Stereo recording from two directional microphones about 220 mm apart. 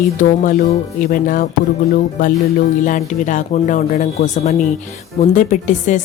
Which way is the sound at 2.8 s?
35° left (ahead or behind).